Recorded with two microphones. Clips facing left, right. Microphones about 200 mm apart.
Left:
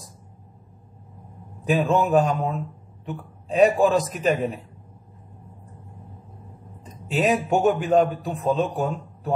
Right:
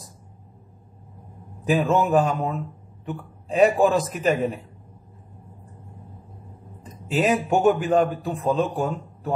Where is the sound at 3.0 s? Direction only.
Centre (ahead or behind).